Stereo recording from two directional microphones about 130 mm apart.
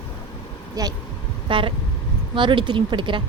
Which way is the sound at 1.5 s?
40° right (ahead or behind).